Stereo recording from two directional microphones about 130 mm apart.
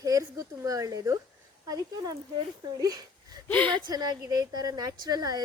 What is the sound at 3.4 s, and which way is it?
Speech, 10° left (ahead or behind).